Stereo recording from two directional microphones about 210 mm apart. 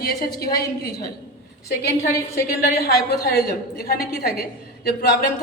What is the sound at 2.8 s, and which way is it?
A woman's voice, 50° left (ahead or behind).